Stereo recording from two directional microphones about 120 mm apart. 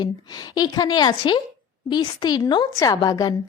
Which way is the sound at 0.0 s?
35° left (ahead or behind).